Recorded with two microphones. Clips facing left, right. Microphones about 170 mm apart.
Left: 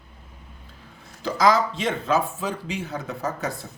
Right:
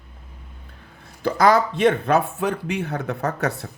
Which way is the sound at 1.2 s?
60° right (ahead or behind).